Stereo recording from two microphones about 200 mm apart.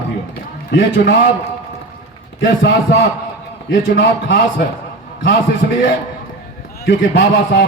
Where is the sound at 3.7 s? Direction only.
65° left (ahead or behind).